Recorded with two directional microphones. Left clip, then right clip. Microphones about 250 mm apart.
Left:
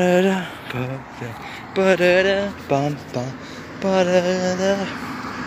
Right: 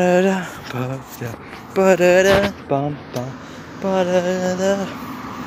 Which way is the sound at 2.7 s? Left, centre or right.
Centre.